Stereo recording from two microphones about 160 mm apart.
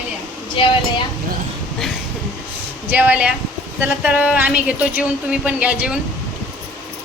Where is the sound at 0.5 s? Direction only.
35° left (ahead or behind).